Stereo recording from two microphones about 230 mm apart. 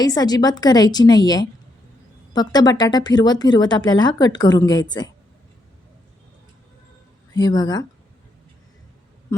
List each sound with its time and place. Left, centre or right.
0.0 s speech: centre
7.3 s speech: centre